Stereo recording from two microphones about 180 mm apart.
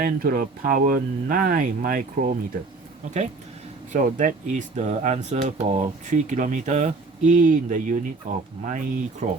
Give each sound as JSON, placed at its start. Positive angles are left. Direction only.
{"t": 0.0, "sound": "speech", "side_deg": -55}
{"t": 3.9, "sound": "speech", "side_deg": -45}